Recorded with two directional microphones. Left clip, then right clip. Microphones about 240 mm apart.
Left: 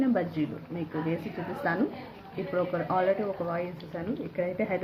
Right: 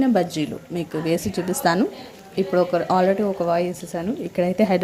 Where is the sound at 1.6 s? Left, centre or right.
Right.